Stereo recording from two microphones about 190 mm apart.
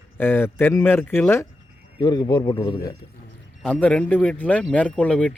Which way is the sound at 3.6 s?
5° left (ahead or behind).